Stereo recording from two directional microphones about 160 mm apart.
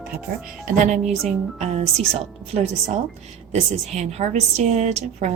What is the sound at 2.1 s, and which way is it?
A woman's voice, 40° right (ahead or behind).